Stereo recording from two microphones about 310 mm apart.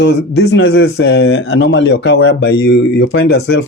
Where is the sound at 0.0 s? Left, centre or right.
Left.